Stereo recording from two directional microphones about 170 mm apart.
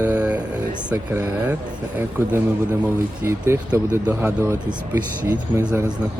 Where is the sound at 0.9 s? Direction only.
15° right (ahead or behind).